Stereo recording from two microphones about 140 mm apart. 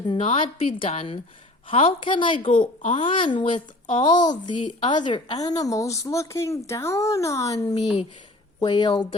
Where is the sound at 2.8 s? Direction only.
55° left (ahead or behind).